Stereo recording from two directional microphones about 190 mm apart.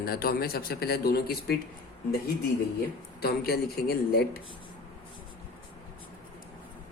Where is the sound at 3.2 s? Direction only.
55° left (ahead or behind).